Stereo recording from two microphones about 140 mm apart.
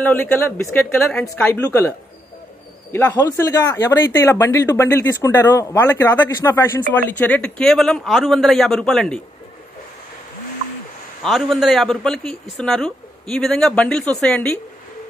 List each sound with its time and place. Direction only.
0.0 s a man's voice: 15° left (ahead or behind)
11.2 s speech: centre (ahead or behind)